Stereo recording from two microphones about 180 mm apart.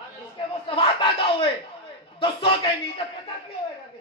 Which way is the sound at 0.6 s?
30° left (ahead or behind).